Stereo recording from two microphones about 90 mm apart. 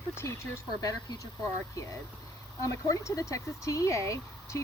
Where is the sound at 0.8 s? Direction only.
40° left (ahead or behind).